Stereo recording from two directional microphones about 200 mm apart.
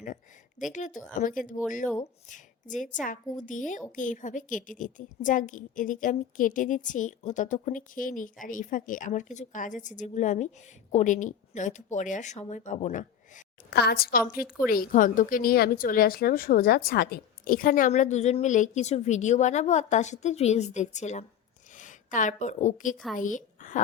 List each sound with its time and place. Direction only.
0.7 s a woman's voice: 40° left (ahead or behind)